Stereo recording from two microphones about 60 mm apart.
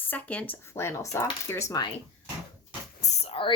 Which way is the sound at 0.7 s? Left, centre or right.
Left.